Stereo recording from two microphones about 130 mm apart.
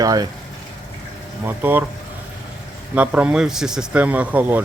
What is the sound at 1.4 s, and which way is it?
Speech, 15° right (ahead or behind).